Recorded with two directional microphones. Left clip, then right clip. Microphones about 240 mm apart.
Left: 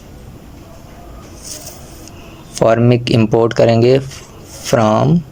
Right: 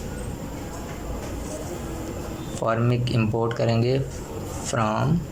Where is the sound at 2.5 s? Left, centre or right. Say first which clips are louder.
Left 13 dB; left.